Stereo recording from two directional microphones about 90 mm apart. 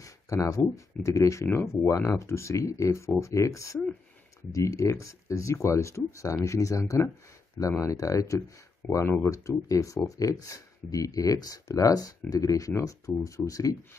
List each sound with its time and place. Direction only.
0.0 s speech: 35° left (ahead or behind)